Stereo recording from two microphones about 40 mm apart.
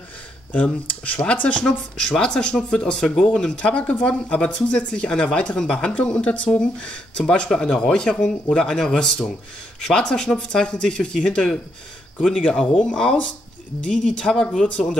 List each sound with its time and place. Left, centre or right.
0.5 s speech: left
1.5 s speech: left
3.5 s speech: left; by 11.6 s centre
12.8 s speech: centre